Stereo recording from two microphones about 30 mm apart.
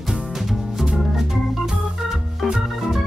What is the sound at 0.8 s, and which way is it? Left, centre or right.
Organ, centre.